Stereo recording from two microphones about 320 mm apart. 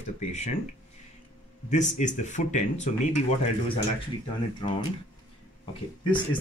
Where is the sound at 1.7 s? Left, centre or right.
Left.